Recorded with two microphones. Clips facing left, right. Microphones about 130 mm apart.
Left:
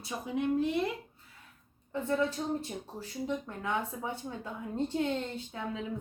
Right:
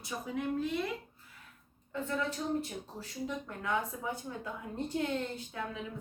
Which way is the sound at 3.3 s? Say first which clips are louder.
Left 1 dB; 20° left (ahead or behind).